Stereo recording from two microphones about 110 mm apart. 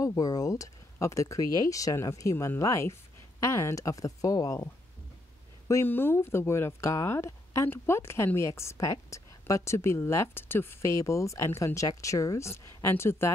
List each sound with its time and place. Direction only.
0.0 s speech: 35° left (ahead or behind)
5.7 s speech: 25° left (ahead or behind)